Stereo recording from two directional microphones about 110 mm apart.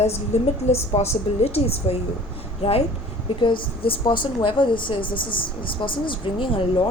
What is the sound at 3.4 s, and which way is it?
Speech, 50° left (ahead or behind).